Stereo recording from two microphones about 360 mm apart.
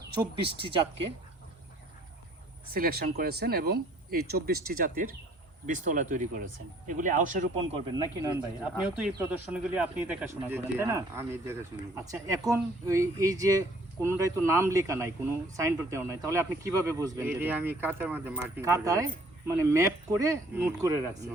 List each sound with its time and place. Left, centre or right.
2.7 s speech: right
5.6 s a man's voice: right